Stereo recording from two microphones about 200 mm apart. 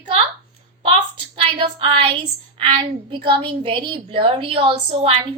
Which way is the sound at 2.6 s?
25° right (ahead or behind).